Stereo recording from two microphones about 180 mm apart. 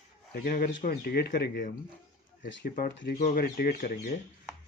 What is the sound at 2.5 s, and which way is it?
Speech, 90° left.